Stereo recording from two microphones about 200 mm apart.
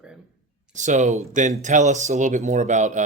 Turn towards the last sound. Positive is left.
turn(degrees=-35)  # may be behind; listen again after turning